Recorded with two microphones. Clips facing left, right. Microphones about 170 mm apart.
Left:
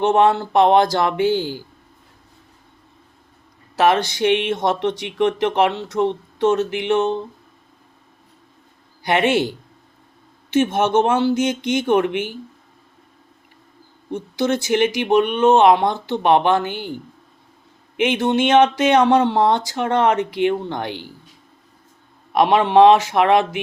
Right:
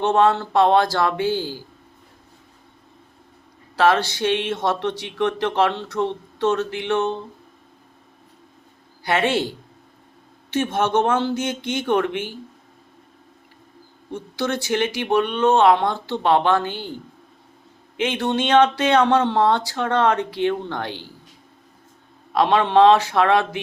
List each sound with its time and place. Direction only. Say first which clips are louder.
0.0 s speech: left 2 dB; 15° left (ahead or behind)
3.8 s speech: left 2 dB; 15° left (ahead or behind)
9.0 s speech: left 3 dB; 15° left (ahead or behind)
10.5 s speech: left 4 dB; 10° left (ahead or behind)
14.1 s speech: left 4 dB; 15° left (ahead or behind)
17.9 s speech: left 4 dB; 15° left (ahead or behind)
22.3 s speech: left 2 dB; 15° left (ahead or behind)